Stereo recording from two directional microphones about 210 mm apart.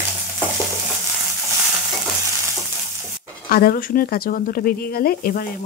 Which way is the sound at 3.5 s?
45° left (ahead or behind).